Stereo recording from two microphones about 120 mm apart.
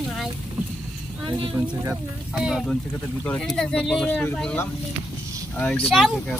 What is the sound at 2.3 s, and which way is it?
Speech, centre (ahead or behind).